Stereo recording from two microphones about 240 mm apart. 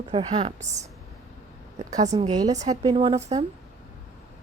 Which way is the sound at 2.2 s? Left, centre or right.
Centre.